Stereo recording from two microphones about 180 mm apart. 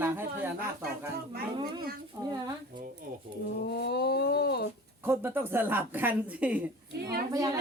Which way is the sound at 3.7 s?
65° left (ahead or behind).